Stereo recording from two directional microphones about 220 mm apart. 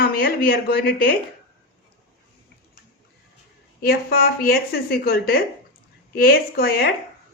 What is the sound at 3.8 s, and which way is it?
A woman's voice, 45° left (ahead or behind).